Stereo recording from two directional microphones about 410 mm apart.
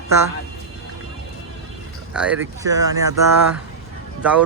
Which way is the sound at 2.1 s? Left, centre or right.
Centre.